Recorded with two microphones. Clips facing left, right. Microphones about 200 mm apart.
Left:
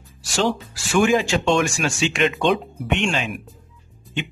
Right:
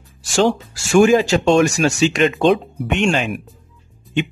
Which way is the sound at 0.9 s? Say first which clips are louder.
Right 6 dB; 40° right (ahead or behind).